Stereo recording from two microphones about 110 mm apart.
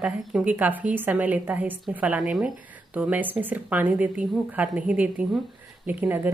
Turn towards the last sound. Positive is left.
turn(degrees=-15)  # may be behind; listen again after turning